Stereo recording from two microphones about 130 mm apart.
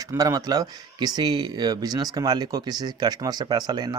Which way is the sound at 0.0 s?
25° right (ahead or behind).